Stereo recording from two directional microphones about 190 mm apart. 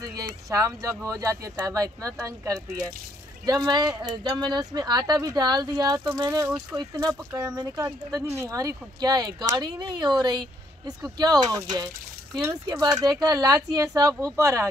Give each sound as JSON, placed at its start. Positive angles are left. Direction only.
{"t": 0.5, "sound": "speech", "side_deg": -20}